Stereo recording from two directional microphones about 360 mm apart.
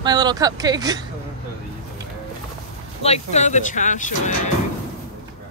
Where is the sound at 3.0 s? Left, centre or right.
Centre.